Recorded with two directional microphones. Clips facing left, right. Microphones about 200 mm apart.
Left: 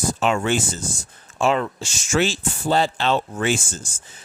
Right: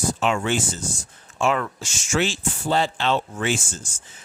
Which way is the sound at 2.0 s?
40° left (ahead or behind).